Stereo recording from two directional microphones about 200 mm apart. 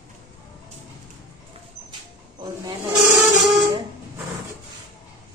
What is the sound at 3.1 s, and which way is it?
Printer, centre (ahead or behind).